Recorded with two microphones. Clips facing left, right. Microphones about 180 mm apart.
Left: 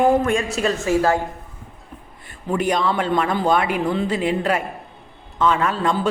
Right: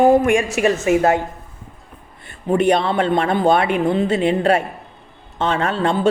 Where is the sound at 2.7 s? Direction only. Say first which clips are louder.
Right 1 dB; 60° right (ahead or behind).